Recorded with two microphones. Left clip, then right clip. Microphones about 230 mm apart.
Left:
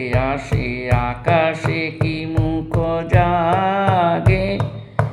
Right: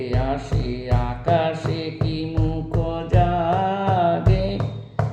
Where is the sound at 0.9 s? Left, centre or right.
Left.